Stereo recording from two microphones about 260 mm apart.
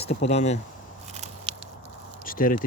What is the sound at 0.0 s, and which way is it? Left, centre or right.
Speech, left.